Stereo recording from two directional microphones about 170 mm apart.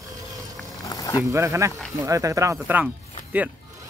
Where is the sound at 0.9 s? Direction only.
20° left (ahead or behind).